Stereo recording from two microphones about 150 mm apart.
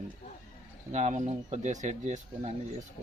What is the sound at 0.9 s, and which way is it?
A man's voice, 50° right (ahead or behind).